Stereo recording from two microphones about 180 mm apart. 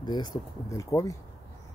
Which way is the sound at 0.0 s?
25° left (ahead or behind).